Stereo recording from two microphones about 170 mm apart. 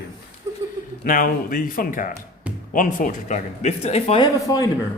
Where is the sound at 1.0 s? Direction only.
55° left (ahead or behind); by 4.2 s 40° left (ahead or behind).